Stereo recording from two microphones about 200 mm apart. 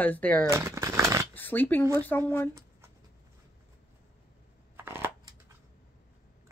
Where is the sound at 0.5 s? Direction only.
15° right (ahead or behind).